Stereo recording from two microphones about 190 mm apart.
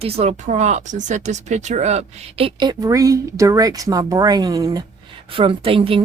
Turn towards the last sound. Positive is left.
turn(degrees=-30)  # may be behind; listen again after turning